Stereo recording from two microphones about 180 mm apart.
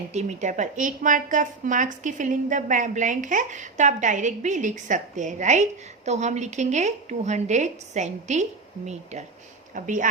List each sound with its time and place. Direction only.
0.1 s a woman's voice: 40° right (ahead or behind)